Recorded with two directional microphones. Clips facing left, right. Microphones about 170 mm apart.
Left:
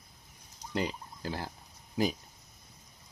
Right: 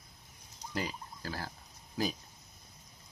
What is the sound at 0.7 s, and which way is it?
Speech, 20° left (ahead or behind).